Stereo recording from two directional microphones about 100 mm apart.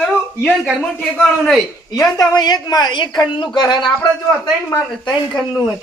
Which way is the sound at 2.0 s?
40° left (ahead or behind).